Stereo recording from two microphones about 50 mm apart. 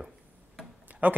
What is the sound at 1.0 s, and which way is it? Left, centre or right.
Speech, right.